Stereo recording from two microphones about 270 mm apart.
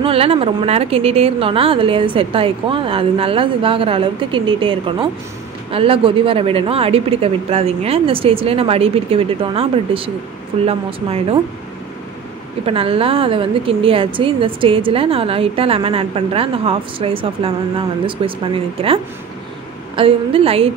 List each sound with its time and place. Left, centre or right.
0.0 s a woman's voice: right
12.6 s a woman's voice: right
20.0 s a woman's voice: right